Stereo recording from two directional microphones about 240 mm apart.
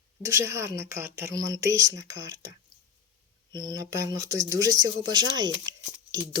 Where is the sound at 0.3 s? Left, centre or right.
Centre.